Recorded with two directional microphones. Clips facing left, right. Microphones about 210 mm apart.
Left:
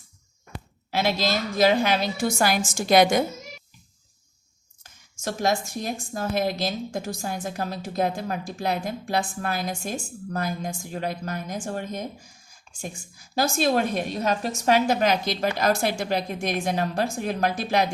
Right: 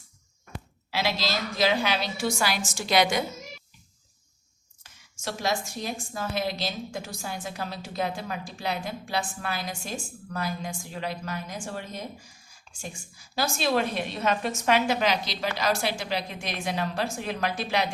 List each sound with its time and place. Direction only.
0.9 s a woman's voice: 50° left (ahead or behind)
4.8 s a woman's voice: 45° left (ahead or behind)
13.3 s a woman's voice: 45° left (ahead or behind)